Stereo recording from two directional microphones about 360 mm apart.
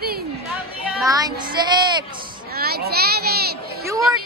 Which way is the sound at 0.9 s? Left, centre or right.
Centre.